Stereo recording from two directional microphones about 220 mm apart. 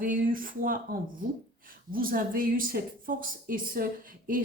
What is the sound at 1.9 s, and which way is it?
Speech, 40° right (ahead or behind).